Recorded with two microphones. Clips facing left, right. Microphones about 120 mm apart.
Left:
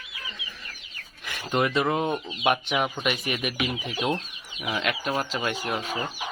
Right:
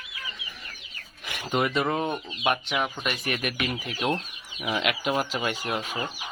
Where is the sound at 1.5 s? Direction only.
5° right (ahead or behind).